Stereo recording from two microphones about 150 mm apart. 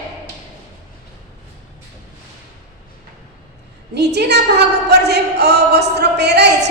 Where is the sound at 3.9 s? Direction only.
90° right.